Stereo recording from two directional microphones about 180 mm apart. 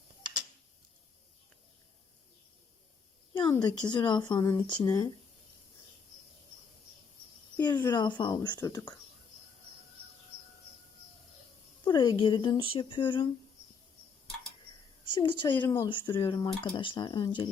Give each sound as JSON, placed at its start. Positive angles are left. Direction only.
{"t": 3.3, "sound": "a sound", "side_deg": 25}
{"t": 3.7, "sound": "speech", "side_deg": 25}
{"t": 7.6, "sound": "speech", "side_deg": 20}
{"t": 11.9, "sound": "speech", "side_deg": 25}
{"t": 15.1, "sound": "speech", "side_deg": 25}
{"t": 15.5, "sound": "speech", "side_deg": 10}
{"t": 15.8, "sound": "speech", "side_deg": 25}